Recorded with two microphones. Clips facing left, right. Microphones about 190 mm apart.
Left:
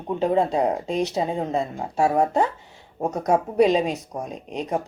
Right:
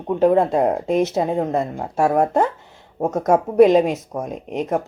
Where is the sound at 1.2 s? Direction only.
65° right (ahead or behind).